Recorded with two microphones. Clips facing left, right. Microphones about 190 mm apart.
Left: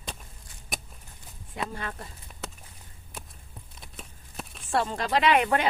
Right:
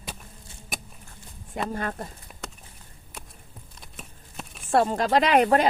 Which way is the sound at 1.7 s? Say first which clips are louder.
Right 6 dB; 45° right (ahead or behind).